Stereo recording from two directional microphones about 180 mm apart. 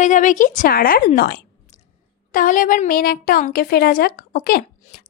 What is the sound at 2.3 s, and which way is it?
A woman's voice, 50° left (ahead or behind).